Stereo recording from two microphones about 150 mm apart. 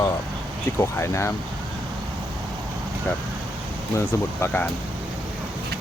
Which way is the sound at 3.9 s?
15° left (ahead or behind).